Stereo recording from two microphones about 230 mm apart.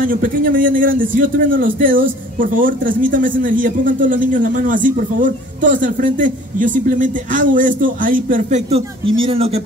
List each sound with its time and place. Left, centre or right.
0.0 s a man's voice: right